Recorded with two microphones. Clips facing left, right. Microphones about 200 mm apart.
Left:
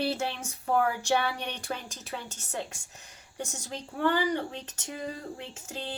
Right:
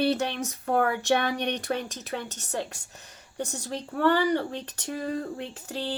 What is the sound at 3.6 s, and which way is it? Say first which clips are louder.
Speech: right 4 dB; 60° right (ahead or behind).